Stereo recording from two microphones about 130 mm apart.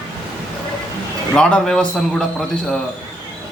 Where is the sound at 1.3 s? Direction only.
5° left (ahead or behind).